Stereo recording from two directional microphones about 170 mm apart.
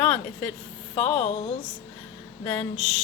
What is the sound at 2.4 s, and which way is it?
Speech, 10° left (ahead or behind).